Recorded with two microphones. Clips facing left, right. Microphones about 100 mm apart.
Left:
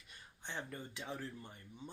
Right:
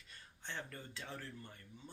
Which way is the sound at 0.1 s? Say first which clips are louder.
Left 1 dB; 15° left (ahead or behind).